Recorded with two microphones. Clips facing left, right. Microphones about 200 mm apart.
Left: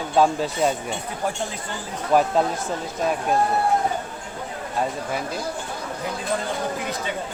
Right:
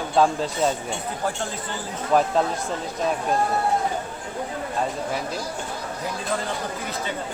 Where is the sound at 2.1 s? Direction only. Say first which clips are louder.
Left 1 dB; 5° left (ahead or behind).